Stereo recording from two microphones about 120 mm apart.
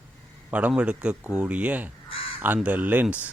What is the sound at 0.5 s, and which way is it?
Speech, 10° right (ahead or behind).